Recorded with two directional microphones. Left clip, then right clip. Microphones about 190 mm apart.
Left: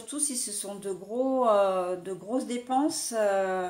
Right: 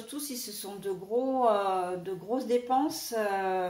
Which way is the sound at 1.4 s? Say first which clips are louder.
Left 4 dB; 45° left (ahead or behind).